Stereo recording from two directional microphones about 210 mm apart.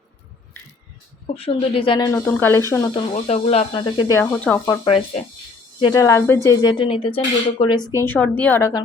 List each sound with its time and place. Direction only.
1.4 s speech: 25° left (ahead or behind)
4.2 s a woman's voice: 10° left (ahead or behind)